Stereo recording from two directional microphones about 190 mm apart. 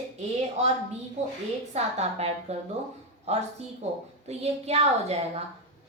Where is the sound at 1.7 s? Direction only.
35° right (ahead or behind).